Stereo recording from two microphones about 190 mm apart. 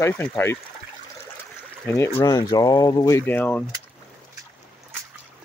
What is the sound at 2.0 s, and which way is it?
Speech, 15° left (ahead or behind).